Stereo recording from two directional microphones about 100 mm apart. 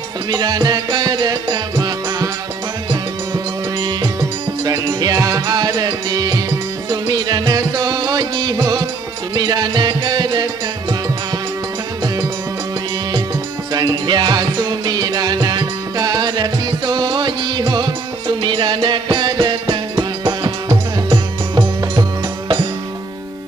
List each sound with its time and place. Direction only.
0.3 s music: 45° right (ahead or behind)
3.8 s music: 40° right (ahead or behind)
13.7 s music: 45° right (ahead or behind)